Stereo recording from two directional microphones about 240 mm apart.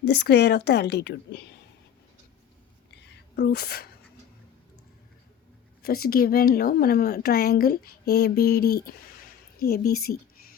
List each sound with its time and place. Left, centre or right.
0.0 s a woman's voice: left
2.9 s whispering: left
5.8 s a woman's voice: left